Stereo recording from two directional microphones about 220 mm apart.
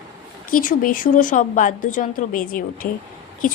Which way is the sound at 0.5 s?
40° left (ahead or behind).